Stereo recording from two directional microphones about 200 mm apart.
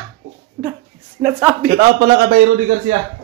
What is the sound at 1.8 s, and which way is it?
Speech, 50° right (ahead or behind).